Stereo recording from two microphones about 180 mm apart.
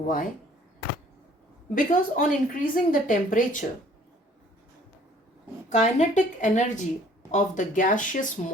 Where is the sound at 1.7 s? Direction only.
50° left (ahead or behind).